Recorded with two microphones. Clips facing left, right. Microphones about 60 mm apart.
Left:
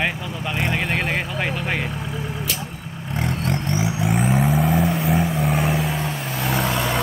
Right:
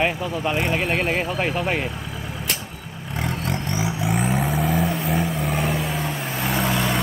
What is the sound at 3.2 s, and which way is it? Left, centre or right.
Vehicle, centre.